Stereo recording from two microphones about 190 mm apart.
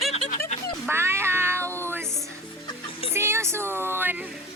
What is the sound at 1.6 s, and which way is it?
Music, 10° left (ahead or behind).